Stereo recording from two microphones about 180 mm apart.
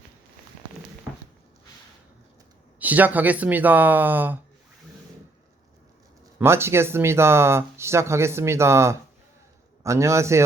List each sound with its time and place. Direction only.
2.7 s speech: 10° right (ahead or behind)
6.4 s speech: 15° right (ahead or behind)